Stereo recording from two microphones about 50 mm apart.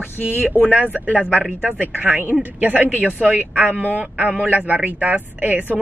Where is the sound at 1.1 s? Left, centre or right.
Right.